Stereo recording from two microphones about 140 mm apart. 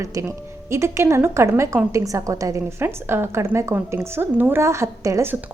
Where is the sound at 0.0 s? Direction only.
20° right (ahead or behind).